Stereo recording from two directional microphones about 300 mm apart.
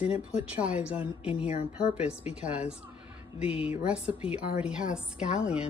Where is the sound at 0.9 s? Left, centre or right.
Centre.